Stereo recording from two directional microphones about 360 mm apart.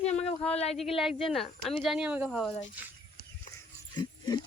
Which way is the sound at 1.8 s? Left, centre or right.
Centre.